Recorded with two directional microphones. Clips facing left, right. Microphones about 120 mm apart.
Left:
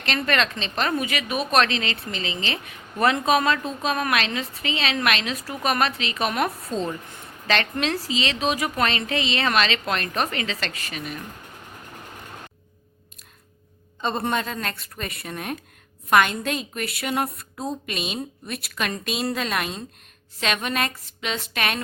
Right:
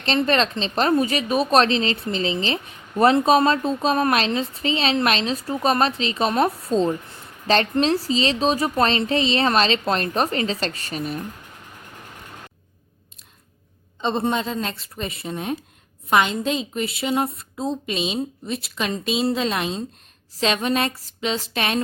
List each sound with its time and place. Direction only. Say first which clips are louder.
0.0 s speech: right 4 dB; 30° right (ahead or behind)
14.0 s a woman's voice: right 3 dB; 20° right (ahead or behind)